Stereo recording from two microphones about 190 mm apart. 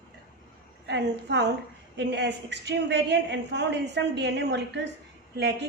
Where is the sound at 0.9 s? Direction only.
65° right (ahead or behind).